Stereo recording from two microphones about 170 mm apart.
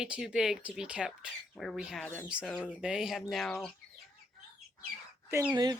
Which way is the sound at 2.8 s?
5° right (ahead or behind).